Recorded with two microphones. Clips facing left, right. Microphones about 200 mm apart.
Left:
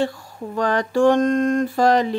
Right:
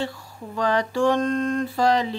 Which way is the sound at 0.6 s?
50° left (ahead or behind).